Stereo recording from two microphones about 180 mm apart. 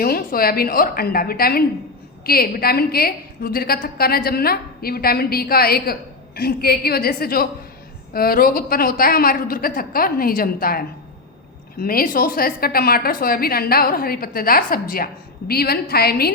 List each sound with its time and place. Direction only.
0.0 s a woman's voice: 55° left (ahead or behind)